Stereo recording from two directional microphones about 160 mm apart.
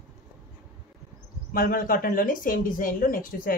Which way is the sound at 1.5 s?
60° left (ahead or behind).